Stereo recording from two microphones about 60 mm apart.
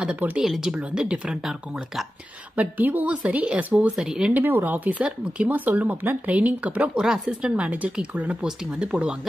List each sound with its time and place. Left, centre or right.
0.4 s speech: centre
2.5 s speech: right
3.9 s speech: centre
4.3 s speech: right
7.0 s speech: centre